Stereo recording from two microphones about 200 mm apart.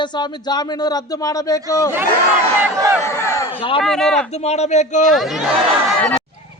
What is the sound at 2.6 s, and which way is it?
Speech, 15° right (ahead or behind).